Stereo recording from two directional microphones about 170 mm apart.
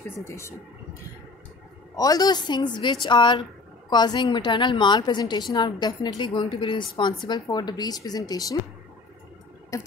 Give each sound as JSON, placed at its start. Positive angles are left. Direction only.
{"t": 0.2, "sound": "speech", "side_deg": 15}
{"t": 2.0, "sound": "a woman's voice", "side_deg": 20}
{"t": 9.7, "sound": "a woman's voice", "side_deg": 20}